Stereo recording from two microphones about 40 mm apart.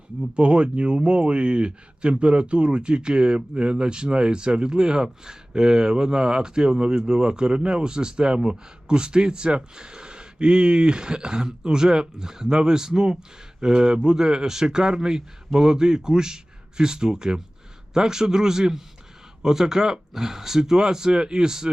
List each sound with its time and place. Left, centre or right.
0.3 s speech: right